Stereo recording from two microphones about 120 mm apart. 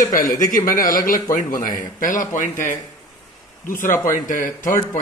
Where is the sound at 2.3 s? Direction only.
90° left.